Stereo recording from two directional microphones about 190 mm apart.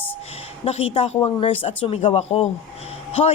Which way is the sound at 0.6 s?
30° left (ahead or behind).